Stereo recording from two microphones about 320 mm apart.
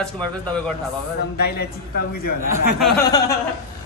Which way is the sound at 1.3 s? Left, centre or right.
Left.